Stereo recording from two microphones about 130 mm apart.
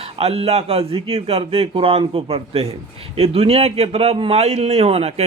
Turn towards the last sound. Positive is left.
turn(degrees=-50)  # may be behind; listen again after turning